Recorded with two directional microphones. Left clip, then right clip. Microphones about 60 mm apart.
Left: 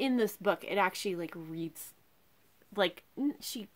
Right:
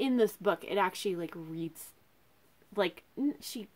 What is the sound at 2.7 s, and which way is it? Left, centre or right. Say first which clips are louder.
Speech: left 1 dB; left.